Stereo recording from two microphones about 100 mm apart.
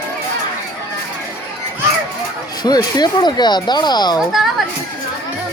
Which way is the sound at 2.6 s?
45° left (ahead or behind).